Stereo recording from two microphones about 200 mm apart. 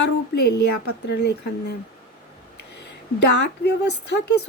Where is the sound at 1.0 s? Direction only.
55° left (ahead or behind).